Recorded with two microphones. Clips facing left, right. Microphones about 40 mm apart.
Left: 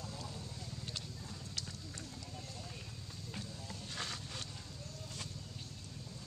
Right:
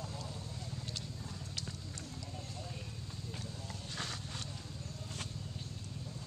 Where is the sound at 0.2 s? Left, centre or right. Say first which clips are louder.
Right 1 dB; centre.